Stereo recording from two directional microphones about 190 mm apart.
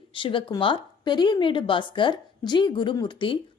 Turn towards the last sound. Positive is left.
turn(degrees=25)  # may be behind; listen again after turning